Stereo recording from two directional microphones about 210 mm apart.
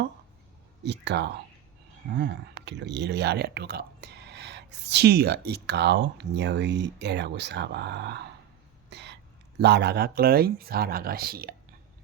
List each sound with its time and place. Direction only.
0.9 s speech: 55° right (ahead or behind)
8.9 s a sound: 55° right (ahead or behind)
9.6 s speech: 55° right (ahead or behind)